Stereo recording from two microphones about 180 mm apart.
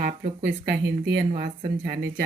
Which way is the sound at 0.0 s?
55° right (ahead or behind).